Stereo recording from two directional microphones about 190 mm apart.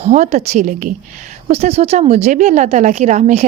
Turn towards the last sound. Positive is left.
turn(degrees=-40)  # may be behind; listen again after turning